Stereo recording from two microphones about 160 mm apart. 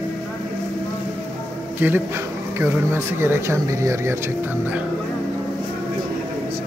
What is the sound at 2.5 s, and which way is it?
Speech, 15° right (ahead or behind).